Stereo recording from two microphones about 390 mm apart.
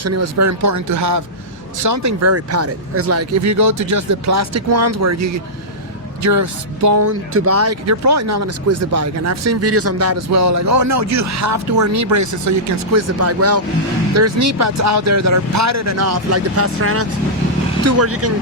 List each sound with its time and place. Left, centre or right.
0.0 s speech: right